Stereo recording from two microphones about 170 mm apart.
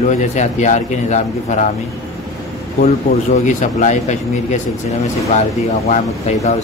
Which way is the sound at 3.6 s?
45° left (ahead or behind).